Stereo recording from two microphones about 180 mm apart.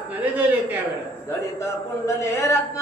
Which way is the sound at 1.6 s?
15° left (ahead or behind).